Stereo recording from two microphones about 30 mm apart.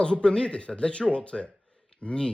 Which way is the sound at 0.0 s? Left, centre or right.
Left.